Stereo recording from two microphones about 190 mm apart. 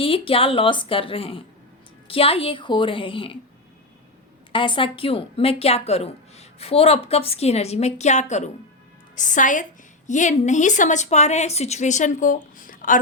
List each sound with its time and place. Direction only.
0.0 s a woman's voice: 30° left (ahead or behind)
4.5 s a woman's voice: 25° left (ahead or behind); by 13.0 s 45° left (ahead or behind)